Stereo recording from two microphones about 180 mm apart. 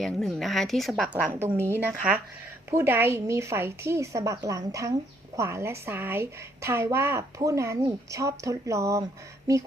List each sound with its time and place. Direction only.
0.0 s speech: centre (ahead or behind); by 9.0 s 15° right (ahead or behind)